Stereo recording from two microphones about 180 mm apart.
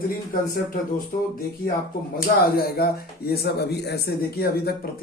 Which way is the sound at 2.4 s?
60° left (ahead or behind).